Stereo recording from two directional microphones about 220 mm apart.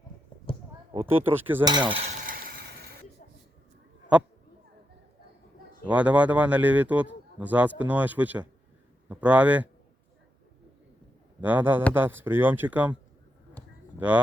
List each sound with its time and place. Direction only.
1.0 s a man's voice: 10° right (ahead or behind)
1.9 s stir: 30° right (ahead or behind)
4.1 s speech: 5° right (ahead or behind)
5.9 s a man's voice: 5° right (ahead or behind)
11.3 s a man's voice: 10° right (ahead or behind)